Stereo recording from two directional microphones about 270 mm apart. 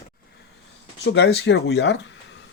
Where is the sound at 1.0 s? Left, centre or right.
Left.